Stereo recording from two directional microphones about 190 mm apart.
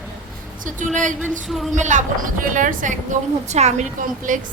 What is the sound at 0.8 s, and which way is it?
A woman's voice, 40° right (ahead or behind).